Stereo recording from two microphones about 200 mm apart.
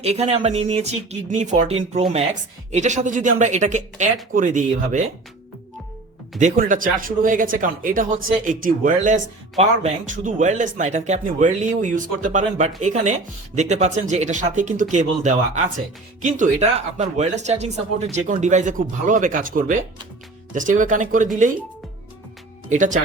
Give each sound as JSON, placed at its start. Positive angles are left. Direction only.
{"t": 0.0, "sound": "speech", "side_deg": -30}
{"t": 6.4, "sound": "speech", "side_deg": -40}
{"t": 22.7, "sound": "speech", "side_deg": -40}